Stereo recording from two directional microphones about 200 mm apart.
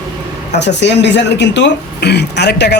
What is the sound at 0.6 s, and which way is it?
Speech, 60° left (ahead or behind).